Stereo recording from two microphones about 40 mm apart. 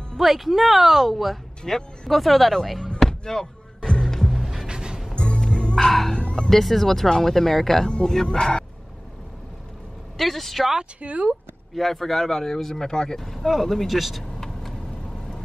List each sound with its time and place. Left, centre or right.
0.2 s speech: centre
3.0 s slam: centre
4.3 s music: centre
4.6 s music: centre
5.1 s music: left
5.9 s a sound: centre
6.1 s a sound: left
6.5 s speech: centre; by 8.6 s left
10.1 s speech: centre
11.0 s speech: right
11.7 s speech: centre
14.2 s vehicle: centre